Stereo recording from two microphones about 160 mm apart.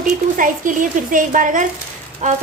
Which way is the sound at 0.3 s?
55° right (ahead or behind).